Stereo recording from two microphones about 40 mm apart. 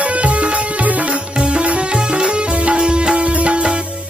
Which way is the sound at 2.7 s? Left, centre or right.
Right.